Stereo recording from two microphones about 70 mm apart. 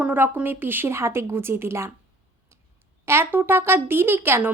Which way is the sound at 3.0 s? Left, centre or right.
Right.